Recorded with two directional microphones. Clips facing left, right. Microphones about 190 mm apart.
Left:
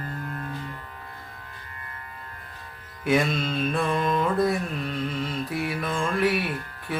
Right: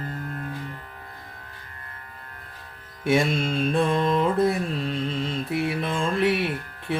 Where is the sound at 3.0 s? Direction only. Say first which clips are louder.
Right 1 dB; 25° right (ahead or behind).